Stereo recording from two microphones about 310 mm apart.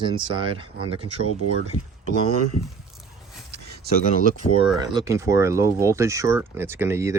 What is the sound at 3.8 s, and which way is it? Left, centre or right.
Speech, right.